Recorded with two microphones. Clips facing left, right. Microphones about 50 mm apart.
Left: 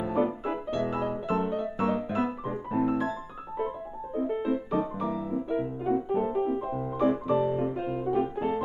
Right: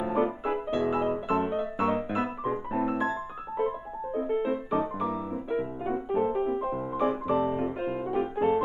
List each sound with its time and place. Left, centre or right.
0.0 s piano: centre